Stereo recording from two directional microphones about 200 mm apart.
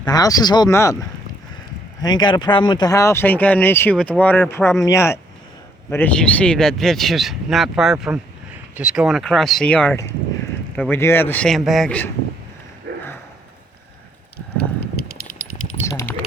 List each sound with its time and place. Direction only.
0.0 s speech: 20° left (ahead or behind)
2.0 s speech: 20° left (ahead or behind)
15.9 s a sound: 15° left (ahead or behind)